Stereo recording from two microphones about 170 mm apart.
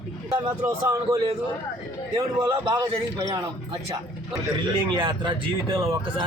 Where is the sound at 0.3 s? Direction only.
10° right (ahead or behind).